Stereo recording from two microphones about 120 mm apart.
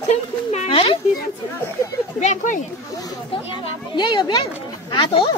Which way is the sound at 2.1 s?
85° left.